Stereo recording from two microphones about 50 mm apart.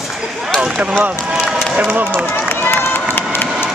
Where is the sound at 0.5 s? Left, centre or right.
Centre.